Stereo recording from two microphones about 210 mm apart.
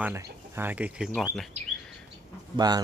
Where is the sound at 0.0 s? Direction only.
10° right (ahead or behind).